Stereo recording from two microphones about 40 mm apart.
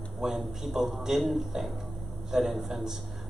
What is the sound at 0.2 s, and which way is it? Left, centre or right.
Speech, centre.